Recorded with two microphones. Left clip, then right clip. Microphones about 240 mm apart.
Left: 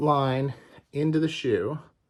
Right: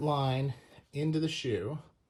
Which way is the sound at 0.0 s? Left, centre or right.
Left.